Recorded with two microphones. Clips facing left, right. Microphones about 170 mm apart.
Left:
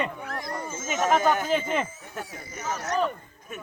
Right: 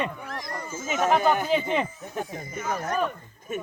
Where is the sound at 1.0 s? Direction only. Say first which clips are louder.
Right 1 dB; 10° right (ahead or behind).